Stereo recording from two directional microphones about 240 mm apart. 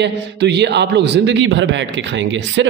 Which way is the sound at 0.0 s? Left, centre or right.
Right.